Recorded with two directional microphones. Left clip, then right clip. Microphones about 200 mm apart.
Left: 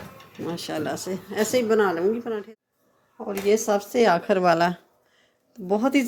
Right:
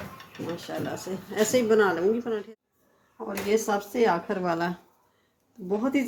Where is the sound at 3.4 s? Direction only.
50° left (ahead or behind).